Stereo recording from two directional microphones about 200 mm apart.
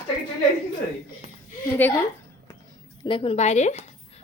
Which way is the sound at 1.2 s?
30° right (ahead or behind).